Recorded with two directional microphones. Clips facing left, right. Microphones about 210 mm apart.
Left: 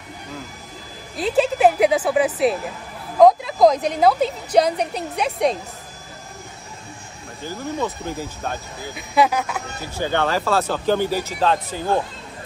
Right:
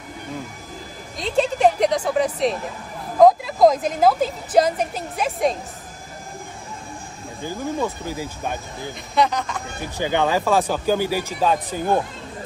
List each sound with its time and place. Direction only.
1.1 s a woman's voice: 5° left (ahead or behind)
7.4 s speech: 15° right (ahead or behind)
8.9 s a woman's voice: 5° left (ahead or behind)
9.9 s speech: 15° right (ahead or behind)